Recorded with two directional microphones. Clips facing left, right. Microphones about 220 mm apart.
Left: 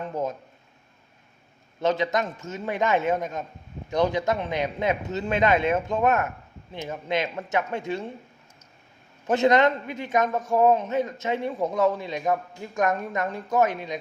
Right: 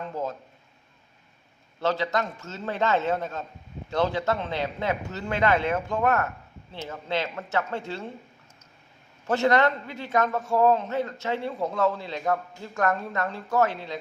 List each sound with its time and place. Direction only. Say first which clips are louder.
0.0 s speech: left 2 dB; 20° left (ahead or behind)
1.8 s a man's voice: left 2 dB; 20° left (ahead or behind)
9.2 s a man's voice: left 2 dB; 20° left (ahead or behind)